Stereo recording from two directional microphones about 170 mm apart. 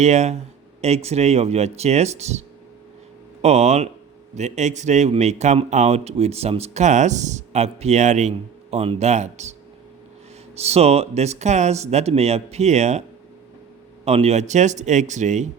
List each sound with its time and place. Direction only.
0.0 s speech: 40° right (ahead or behind)
3.4 s speech: 40° right (ahead or behind)
14.0 s speech: 35° right (ahead or behind)